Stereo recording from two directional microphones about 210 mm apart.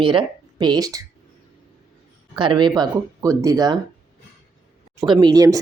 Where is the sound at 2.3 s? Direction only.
20° right (ahead or behind).